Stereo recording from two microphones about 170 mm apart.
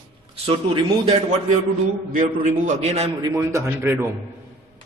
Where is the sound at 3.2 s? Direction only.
15° right (ahead or behind).